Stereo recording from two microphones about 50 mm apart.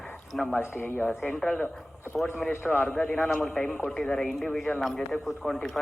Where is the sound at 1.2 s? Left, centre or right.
Centre.